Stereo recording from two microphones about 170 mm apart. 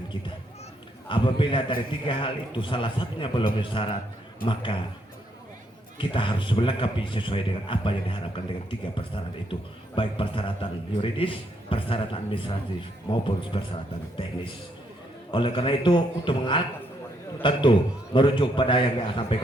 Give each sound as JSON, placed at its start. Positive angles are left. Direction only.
{"t": 1.0, "sound": "a man's voice", "side_deg": 30}
{"t": 6.0, "sound": "a man's voice", "side_deg": 30}
{"t": 15.3, "sound": "a man's voice", "side_deg": 30}